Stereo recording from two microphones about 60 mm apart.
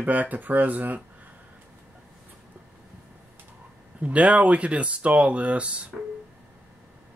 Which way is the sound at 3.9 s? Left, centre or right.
Right.